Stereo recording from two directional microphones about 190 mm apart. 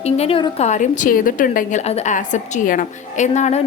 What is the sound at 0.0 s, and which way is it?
A woman's voice, 30° left (ahead or behind).